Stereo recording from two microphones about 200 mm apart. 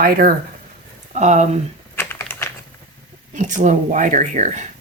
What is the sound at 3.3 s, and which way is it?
Speech, 40° right (ahead or behind).